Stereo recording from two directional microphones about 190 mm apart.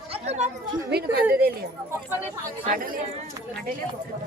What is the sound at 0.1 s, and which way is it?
Chatter, 35° right (ahead or behind).